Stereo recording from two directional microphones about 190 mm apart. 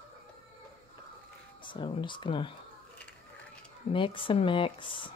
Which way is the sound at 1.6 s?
25° left (ahead or behind).